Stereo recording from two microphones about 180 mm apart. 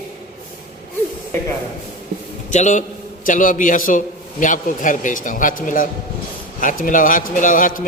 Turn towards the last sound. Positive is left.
turn(degrees=50)  # may be behind; listen again after turning